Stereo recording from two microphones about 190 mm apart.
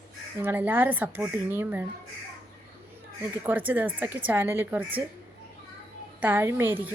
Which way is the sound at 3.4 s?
10° right (ahead or behind).